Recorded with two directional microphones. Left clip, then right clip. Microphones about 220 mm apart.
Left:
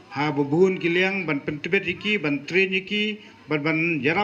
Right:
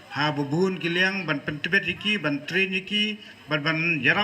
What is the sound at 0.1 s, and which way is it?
A man's voice, 15° left (ahead or behind).